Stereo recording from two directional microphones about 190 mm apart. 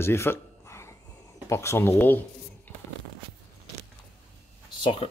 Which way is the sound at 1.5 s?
15° left (ahead or behind).